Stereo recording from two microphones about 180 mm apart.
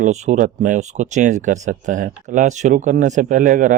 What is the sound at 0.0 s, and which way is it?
Speech, 40° right (ahead or behind).